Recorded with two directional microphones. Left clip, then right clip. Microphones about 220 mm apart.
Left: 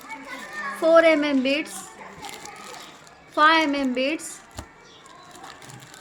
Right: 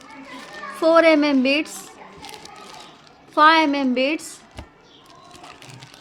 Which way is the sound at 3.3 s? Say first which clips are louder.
Right 3 dB; 30° right (ahead or behind).